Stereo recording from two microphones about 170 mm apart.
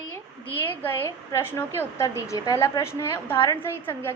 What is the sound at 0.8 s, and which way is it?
A woman's voice, 15° left (ahead or behind).